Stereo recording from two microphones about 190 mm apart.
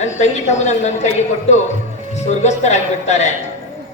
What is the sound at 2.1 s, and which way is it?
A woman's voice, 35° left (ahead or behind).